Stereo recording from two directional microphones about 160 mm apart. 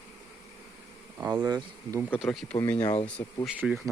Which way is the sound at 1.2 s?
15° right (ahead or behind).